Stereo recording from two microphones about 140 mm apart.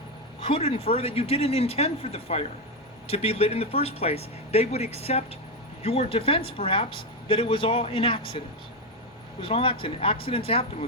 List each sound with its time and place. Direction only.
0.3 s a woman's voice: 40° left (ahead or behind)
9.4 s a woman's voice: 40° left (ahead or behind)